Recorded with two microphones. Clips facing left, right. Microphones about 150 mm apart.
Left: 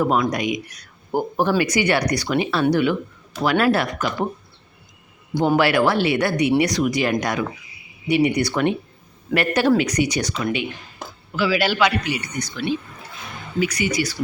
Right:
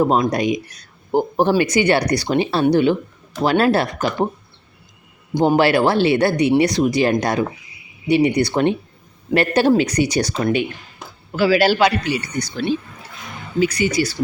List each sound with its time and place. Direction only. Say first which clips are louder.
0.0 s speech: right 3 dB; 30° right (ahead or behind)
5.3 s speech: right 3 dB; 20° right (ahead or behind)